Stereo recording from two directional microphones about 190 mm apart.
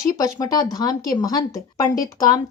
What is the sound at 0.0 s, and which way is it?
Speech, 20° left (ahead or behind).